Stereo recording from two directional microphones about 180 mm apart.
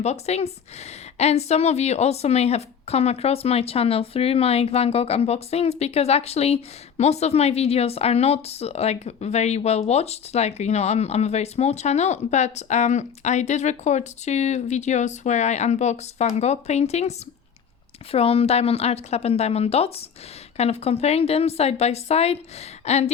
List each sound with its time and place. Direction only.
0.0 s a woman's voice: 35° left (ahead or behind)